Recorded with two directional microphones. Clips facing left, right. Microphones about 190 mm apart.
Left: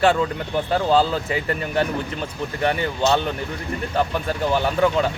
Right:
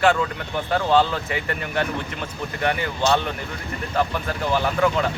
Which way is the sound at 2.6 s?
25° left (ahead or behind).